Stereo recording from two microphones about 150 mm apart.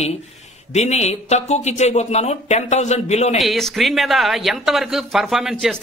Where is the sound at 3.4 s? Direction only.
Centre (ahead or behind).